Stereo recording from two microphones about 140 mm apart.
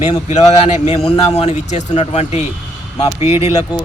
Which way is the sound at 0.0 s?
55° left (ahead or behind).